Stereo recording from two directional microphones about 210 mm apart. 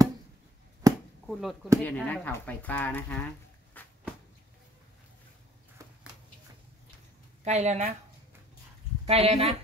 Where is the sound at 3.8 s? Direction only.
10° left (ahead or behind).